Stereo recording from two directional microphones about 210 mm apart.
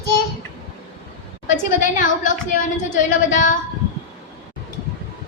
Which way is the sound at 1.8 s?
40° left (ahead or behind).